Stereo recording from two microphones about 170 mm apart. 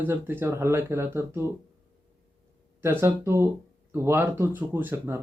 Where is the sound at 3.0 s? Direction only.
15° right (ahead or behind).